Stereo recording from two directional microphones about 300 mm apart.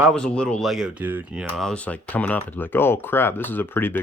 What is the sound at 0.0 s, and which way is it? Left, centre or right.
Speech, centre.